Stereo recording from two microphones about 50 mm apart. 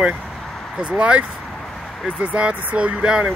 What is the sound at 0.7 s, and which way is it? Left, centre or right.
Speech, right.